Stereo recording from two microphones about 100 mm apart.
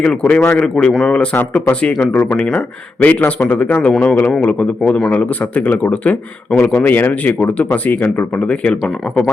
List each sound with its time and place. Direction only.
0.0 s a man's voice: 10° left (ahead or behind)
8.4 s a man's voice: 10° left (ahead or behind)